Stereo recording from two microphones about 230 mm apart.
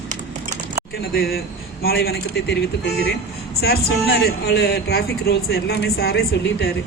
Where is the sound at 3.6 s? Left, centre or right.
Left.